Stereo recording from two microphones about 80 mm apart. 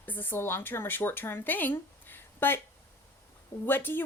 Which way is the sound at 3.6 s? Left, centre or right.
Left.